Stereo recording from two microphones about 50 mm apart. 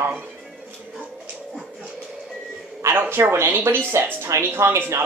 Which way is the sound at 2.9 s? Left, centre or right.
Right.